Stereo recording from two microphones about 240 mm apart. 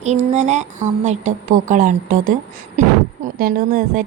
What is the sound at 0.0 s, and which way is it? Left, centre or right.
A woman's voice, right.